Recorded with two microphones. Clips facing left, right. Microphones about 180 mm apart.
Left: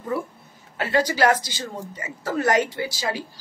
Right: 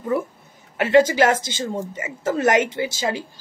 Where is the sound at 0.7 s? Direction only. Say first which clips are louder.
Right 6 dB; 25° right (ahead or behind).